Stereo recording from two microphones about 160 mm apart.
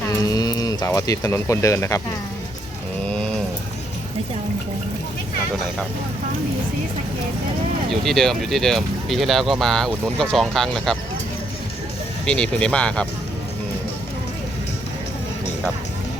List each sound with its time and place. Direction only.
0.1 s speech: 25° left (ahead or behind)
3.1 s a sound: 5° left (ahead or behind)
7.9 s speech: centre (ahead or behind)
12.2 s speech: 5° left (ahead or behind)